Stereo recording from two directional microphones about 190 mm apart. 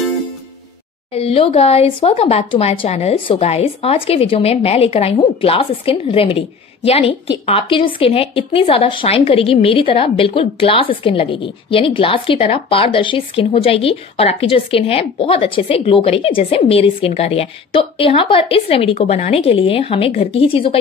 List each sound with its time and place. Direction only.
1.1 s speech: 30° left (ahead or behind)